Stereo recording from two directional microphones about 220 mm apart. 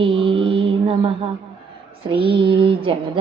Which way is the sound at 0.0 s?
25° right (ahead or behind).